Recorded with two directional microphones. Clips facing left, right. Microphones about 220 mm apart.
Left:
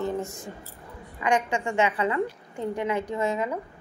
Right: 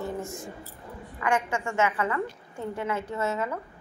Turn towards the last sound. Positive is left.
turn(degrees=15)  # may be behind; listen again after turning